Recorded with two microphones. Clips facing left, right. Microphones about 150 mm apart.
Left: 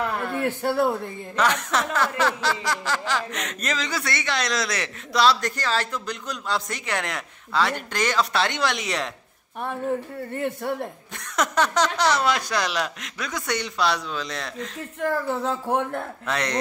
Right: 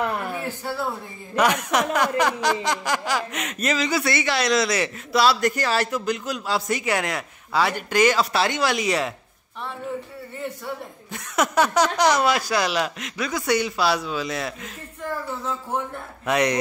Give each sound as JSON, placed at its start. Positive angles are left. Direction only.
{"t": 0.4, "sound": "a man's voice", "side_deg": 60}
{"t": 1.3, "sound": "chuckle", "side_deg": -10}
{"t": 9.6, "sound": "speech", "side_deg": 50}
{"t": 11.1, "sound": "chuckle", "side_deg": -10}
{"t": 15.0, "sound": "speech", "side_deg": 65}
{"t": 16.3, "sound": "chuckle", "side_deg": -15}